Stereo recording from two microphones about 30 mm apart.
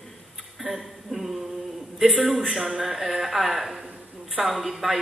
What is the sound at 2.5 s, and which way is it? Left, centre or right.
A woman's voice, centre.